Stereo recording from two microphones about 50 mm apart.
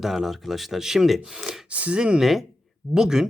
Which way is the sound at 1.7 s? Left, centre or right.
Right.